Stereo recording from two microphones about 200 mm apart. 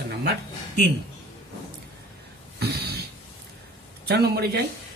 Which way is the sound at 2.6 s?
55° right (ahead or behind).